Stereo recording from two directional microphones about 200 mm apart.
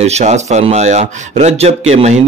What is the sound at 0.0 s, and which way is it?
A man's voice, 35° right (ahead or behind).